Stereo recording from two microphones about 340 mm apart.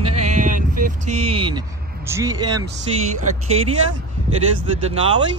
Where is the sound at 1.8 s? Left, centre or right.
Right.